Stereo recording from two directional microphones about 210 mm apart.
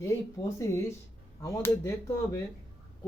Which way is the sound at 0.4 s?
15° left (ahead or behind).